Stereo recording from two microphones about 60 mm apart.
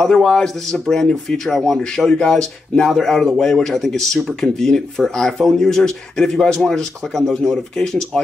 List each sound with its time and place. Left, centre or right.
0.0 s speech: centre